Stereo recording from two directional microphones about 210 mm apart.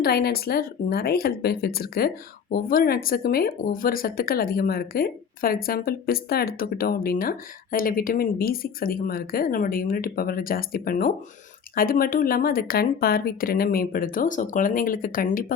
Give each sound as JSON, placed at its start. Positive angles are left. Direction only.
{"t": 0.0, "sound": "speech", "side_deg": 50}